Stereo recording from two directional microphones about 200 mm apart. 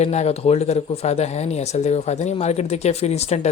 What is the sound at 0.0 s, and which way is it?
Speech, 35° left (ahead or behind).